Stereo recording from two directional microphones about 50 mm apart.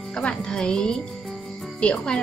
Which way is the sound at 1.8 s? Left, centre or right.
Centre.